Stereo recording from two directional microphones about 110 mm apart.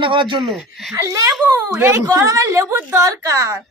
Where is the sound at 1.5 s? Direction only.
20° right (ahead or behind).